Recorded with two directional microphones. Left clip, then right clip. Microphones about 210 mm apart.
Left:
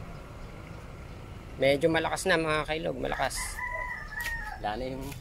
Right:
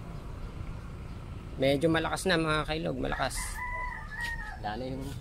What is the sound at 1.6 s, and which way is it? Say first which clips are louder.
Speech: left 2 dB; 5° right (ahead or behind).